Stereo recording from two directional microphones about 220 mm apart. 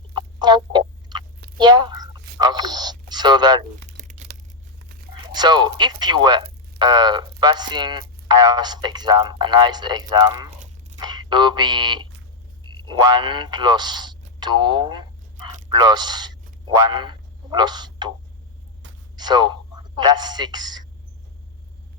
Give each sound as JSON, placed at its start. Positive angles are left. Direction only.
{"t": 0.1, "sound": "chicken", "side_deg": -20}
{"t": 1.5, "sound": "speech", "side_deg": -20}
{"t": 3.8, "sound": "crumpling", "side_deg": -35}
{"t": 5.2, "sound": "speech", "side_deg": -20}
{"t": 19.1, "sound": "speech", "side_deg": -20}